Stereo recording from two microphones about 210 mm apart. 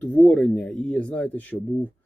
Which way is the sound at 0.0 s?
5° left (ahead or behind).